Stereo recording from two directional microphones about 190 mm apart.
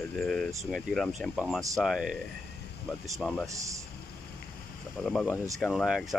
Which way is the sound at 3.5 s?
15° right (ahead or behind).